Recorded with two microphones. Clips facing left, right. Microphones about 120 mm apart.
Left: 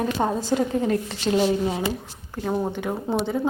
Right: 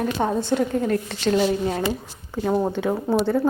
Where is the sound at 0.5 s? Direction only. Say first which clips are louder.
Even; 20° left (ahead or behind).